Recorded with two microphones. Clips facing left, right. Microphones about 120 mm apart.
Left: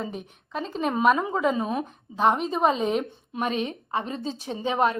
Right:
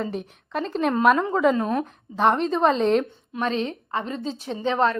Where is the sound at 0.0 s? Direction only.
Centre (ahead or behind).